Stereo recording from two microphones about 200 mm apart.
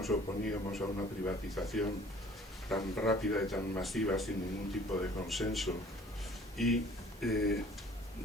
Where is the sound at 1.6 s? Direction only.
5° left (ahead or behind).